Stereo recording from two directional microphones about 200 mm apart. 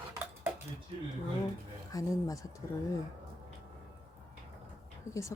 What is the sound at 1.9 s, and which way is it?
Speech, 15° left (ahead or behind).